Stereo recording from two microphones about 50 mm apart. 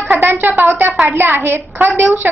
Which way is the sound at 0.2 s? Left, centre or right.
Right.